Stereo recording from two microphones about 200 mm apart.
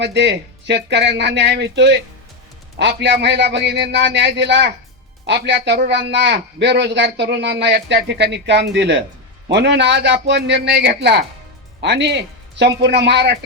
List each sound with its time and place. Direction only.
0.0 s a man's voice: 60° right (ahead or behind)